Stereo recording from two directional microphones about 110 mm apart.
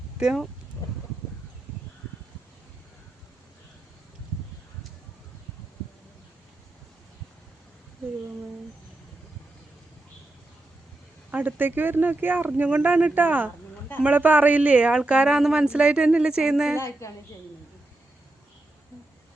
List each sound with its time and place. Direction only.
0.2 s speech: 5° right (ahead or behind)
11.3 s speech: 15° right (ahead or behind)
16.7 s a woman's voice: 25° left (ahead or behind)